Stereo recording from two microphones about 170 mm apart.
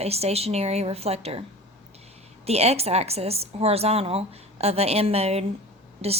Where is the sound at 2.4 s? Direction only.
40° right (ahead or behind).